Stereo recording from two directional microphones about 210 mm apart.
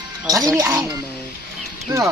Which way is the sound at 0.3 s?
15° right (ahead or behind).